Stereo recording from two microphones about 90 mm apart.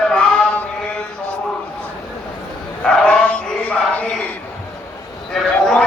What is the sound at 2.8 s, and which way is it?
Dog, 10° left (ahead or behind).